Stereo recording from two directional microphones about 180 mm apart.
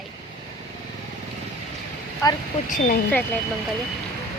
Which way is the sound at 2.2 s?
20° left (ahead or behind).